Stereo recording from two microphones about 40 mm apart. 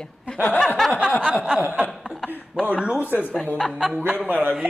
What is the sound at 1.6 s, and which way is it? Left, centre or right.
Chuckle, right.